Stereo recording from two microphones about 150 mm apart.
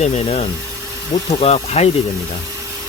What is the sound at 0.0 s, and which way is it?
Speech, 45° left (ahead or behind).